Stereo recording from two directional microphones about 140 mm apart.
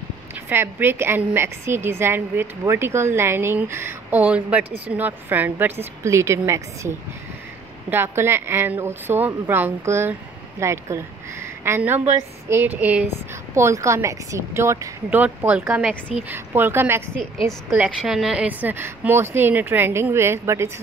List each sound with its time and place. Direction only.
0.5 s a woman's voice: 15° right (ahead or behind)
17.2 s a woman's voice: 5° left (ahead or behind); by 20.7 s 20° right (ahead or behind)